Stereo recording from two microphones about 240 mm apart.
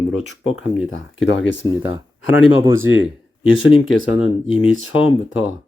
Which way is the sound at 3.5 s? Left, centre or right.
Left.